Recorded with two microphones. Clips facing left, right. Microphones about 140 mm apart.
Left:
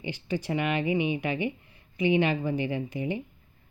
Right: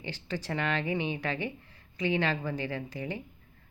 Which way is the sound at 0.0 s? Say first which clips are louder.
Left 5 dB; 15° left (ahead or behind).